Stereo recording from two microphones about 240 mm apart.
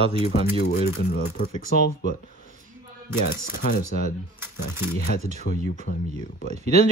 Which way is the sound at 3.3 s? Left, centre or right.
Left.